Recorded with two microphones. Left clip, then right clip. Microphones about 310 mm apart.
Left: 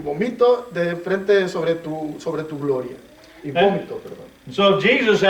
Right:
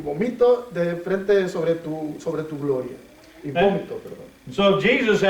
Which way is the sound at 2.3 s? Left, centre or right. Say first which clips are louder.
Left 2 dB; centre.